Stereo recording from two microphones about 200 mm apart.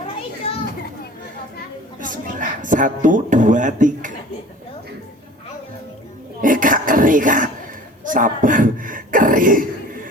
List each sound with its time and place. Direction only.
2.0 s a woman's voice: 40° right (ahead or behind)
6.4 s a sound: 40° right (ahead or behind)
8.0 s speech: 40° right (ahead or behind)